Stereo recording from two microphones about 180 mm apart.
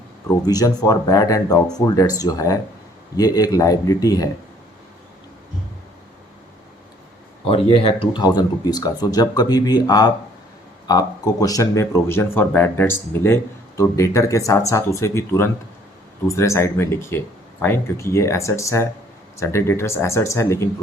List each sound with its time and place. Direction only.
0.3 s speech: 20° left (ahead or behind)
7.4 s speech: 30° left (ahead or behind); by 20.7 s 15° left (ahead or behind)